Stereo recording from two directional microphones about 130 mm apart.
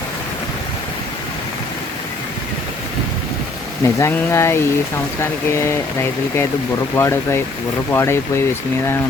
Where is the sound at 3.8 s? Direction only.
20° left (ahead or behind).